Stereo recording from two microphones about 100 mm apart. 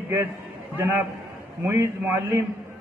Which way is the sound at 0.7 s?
25° right (ahead or behind).